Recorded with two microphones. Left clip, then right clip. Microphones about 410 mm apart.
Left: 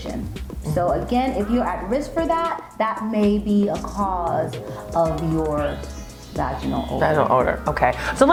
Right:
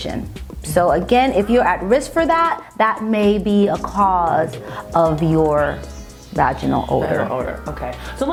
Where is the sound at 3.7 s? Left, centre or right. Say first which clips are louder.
Right 7 dB; centre.